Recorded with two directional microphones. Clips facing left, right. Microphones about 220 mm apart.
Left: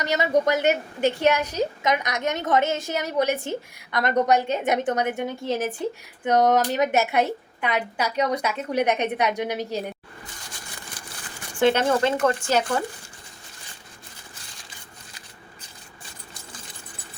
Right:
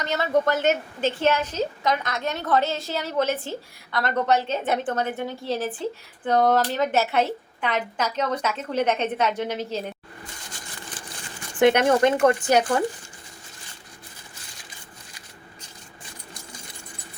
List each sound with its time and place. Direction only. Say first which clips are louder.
0.0 s speech: left 1 dB; 15° left (ahead or behind)
11.6 s speech: right 2 dB; 15° right (ahead or behind)